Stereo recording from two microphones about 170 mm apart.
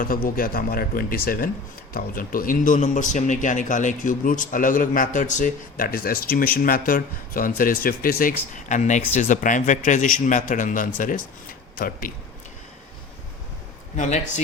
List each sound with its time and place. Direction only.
0.0 s a man's voice: 55° left (ahead or behind)
8.5 s a man's voice: 45° left (ahead or behind)
13.9 s a man's voice: 45° left (ahead or behind)